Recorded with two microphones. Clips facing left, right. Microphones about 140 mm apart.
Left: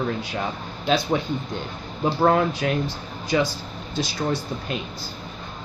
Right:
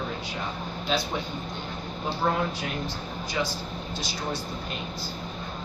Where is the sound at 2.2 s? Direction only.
75° left (ahead or behind).